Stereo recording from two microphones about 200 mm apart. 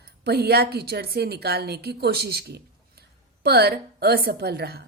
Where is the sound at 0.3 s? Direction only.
55° right (ahead or behind).